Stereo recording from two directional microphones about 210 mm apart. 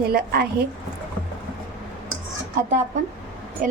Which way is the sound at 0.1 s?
50° right (ahead or behind).